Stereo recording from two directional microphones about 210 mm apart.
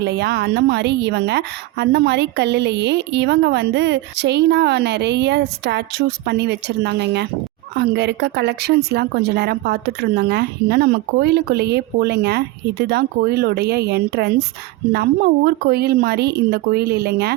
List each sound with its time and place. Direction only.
0.0 s a woman's voice: 50° right (ahead or behind)